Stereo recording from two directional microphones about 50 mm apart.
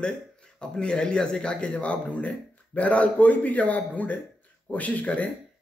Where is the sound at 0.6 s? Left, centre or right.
Centre.